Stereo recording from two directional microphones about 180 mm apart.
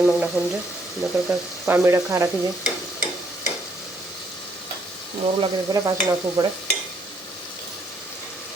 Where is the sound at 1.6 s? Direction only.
10° right (ahead or behind).